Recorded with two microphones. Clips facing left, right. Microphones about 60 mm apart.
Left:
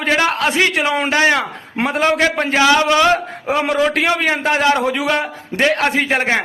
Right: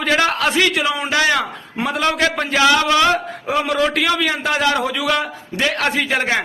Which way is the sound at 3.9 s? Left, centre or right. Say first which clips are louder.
Left 2 dB; left.